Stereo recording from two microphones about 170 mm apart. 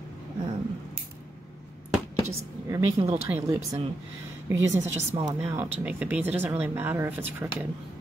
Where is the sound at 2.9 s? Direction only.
35° right (ahead or behind).